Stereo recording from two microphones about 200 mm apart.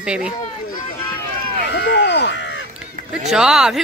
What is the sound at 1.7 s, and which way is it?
Crow, 60° left (ahead or behind).